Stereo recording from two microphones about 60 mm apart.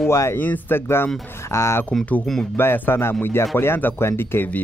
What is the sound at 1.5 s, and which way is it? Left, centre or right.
Speech, left.